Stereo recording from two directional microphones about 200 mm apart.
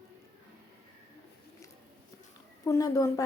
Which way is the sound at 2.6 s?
15° left (ahead or behind).